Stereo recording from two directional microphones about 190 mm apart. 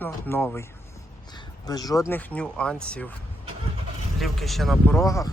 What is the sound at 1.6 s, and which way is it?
Speech, 20° left (ahead or behind).